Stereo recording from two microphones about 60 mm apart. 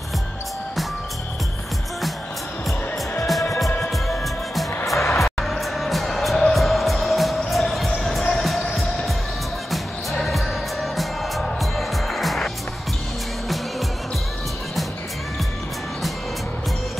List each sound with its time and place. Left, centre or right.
3.3 s music: centre
4.9 s music: left
5.4 s music: centre